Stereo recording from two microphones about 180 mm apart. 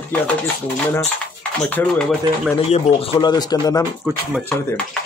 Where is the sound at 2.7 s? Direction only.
25° left (ahead or behind).